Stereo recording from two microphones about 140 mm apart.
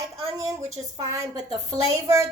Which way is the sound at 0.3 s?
20° right (ahead or behind).